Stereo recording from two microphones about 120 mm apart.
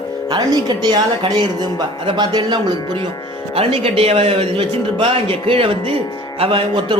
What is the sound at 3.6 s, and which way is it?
A man's voice, 55° right (ahead or behind).